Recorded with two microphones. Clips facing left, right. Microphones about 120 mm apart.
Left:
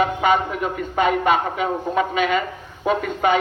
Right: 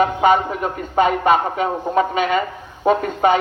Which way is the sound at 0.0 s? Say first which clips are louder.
Right 3 dB; 35° right (ahead or behind).